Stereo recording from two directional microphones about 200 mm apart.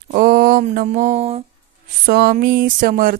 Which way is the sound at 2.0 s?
50° right (ahead or behind).